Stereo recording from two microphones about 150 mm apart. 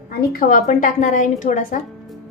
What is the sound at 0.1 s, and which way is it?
A woman's voice, 85° left.